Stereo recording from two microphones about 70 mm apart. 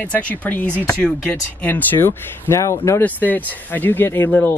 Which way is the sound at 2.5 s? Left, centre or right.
Left.